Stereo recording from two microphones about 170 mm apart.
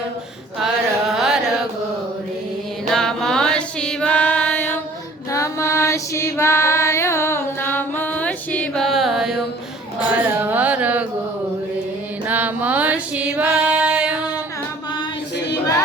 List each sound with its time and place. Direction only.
2.9 s mantra: centre (ahead or behind)
5.3 s female singing: 20° left (ahead or behind); by 9.4 s centre (ahead or behind)
10.2 s carnatic music: 10° right (ahead or behind)
12.3 s music: 10° right (ahead or behind)